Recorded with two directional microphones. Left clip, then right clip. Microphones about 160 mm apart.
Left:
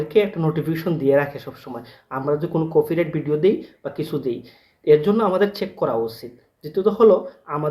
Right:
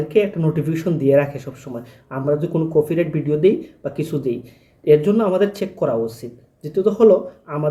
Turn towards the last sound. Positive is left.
turn(degrees=-20)  # may be behind; listen again after turning